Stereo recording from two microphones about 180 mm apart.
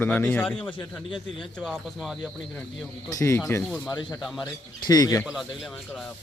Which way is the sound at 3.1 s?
20° left (ahead or behind).